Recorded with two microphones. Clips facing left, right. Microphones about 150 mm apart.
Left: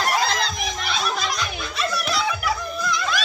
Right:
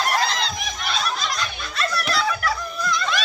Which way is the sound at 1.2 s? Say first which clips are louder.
Left 1 dB; 10° left (ahead or behind).